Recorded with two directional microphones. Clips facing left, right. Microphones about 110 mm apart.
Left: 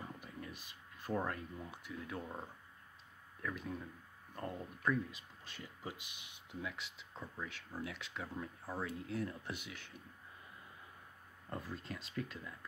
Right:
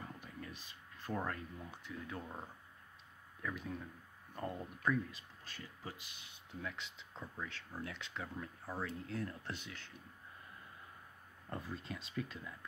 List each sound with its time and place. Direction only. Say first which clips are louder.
0.0 s speech: left 1 dB; 10° left (ahead or behind)
3.4 s speech: even; centre (ahead or behind)
5.1 s speech: even; 15° left (ahead or behind)
6.6 s speech: even; 5° left (ahead or behind)
11.5 s speech: even; centre (ahead or behind)